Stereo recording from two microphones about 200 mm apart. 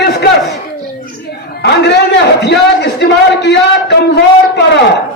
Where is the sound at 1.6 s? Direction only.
55° left (ahead or behind).